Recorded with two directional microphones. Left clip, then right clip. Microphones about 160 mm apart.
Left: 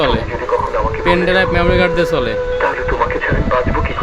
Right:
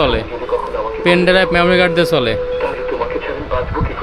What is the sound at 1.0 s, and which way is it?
Music, 15° right (ahead or behind).